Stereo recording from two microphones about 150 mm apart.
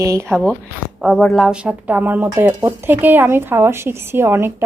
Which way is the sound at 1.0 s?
Centre (ahead or behind).